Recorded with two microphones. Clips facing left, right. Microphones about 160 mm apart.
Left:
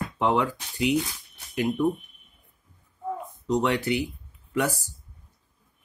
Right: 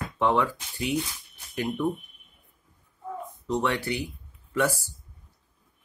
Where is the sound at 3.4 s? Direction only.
15° left (ahead or behind).